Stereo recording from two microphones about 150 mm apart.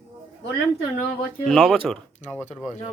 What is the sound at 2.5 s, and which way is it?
Speech, 50° left (ahead or behind).